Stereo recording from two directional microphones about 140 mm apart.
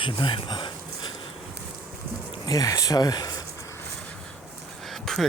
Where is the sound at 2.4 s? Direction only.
25° left (ahead or behind).